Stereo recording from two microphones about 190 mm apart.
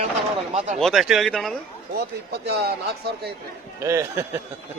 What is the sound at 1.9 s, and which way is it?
Speech, 55° right (ahead or behind).